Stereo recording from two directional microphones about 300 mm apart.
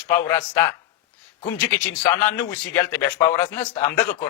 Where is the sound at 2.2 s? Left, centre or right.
Centre.